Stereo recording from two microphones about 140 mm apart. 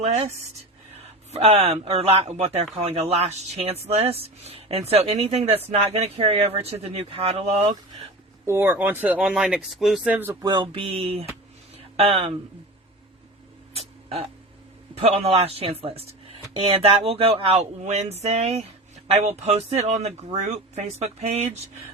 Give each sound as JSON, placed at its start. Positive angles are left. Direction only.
{"t": 0.0, "sound": "speech", "side_deg": -50}
{"t": 8.4, "sound": "speech", "side_deg": -15}
{"t": 10.4, "sound": "a sound", "side_deg": -30}
{"t": 10.7, "sound": "speech", "side_deg": -45}
{"t": 13.7, "sound": "a sound", "side_deg": -45}
{"t": 14.9, "sound": "speech", "side_deg": -45}